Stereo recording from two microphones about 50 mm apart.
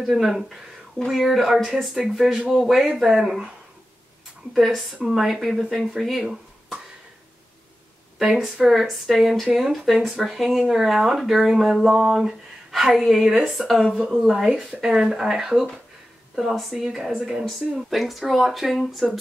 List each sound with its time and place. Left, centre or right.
0.0 s speech: centre
4.6 s speech: centre
8.2 s speech: centre
14.2 s speech: centre